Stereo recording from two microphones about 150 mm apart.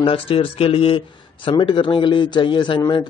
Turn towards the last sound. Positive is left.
turn(degrees=35)  # may be behind; listen again after turning